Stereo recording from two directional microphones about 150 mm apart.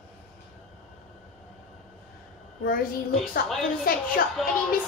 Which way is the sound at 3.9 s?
70° left (ahead or behind).